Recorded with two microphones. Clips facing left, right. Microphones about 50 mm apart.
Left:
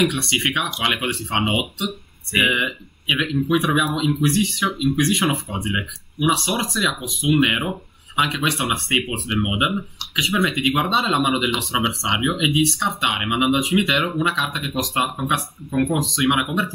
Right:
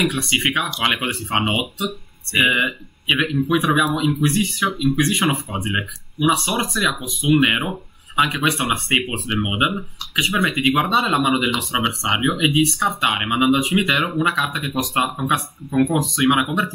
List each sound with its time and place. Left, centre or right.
0.0 s speech: centre
2.6 s speech: centre
3.3 s speech: centre
3.8 s speech: centre